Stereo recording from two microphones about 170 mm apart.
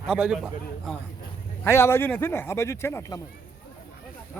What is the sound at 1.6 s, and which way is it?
Speech, 15° left (ahead or behind).